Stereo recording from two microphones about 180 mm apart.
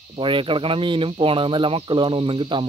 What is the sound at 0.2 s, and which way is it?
Speech, 30° right (ahead or behind).